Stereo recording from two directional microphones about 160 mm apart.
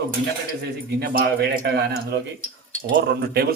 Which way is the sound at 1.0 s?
85° right.